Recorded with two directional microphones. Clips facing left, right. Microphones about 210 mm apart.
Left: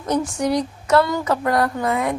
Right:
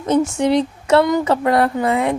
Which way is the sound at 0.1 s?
25° right (ahead or behind).